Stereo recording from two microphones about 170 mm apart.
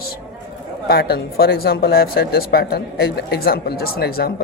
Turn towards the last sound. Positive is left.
turn(degrees=60)  # may be behind; listen again after turning